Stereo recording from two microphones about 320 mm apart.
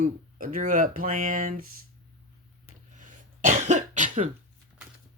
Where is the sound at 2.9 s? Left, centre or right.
Right.